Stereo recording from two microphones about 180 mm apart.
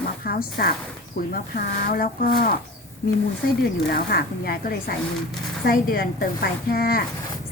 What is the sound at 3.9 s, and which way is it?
Speech, 60° left (ahead or behind).